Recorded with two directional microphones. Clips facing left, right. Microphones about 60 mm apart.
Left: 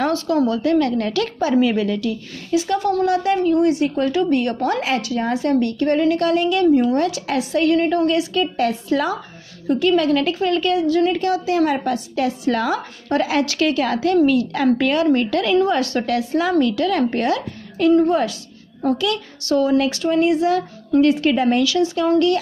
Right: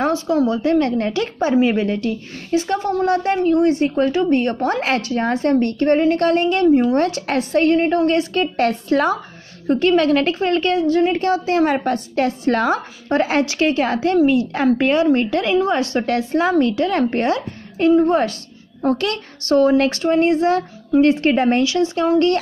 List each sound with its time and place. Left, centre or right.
0.0 s a sound: centre
0.5 s a woman's voice: right
7.0 s a woman's voice: right